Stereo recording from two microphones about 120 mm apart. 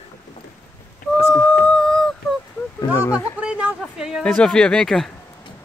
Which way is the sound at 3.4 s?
10° right (ahead or behind).